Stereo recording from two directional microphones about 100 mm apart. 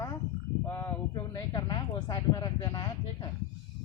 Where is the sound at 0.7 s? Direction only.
25° left (ahead or behind).